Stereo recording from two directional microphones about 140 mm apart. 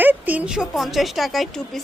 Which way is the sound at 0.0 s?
10° right (ahead or behind).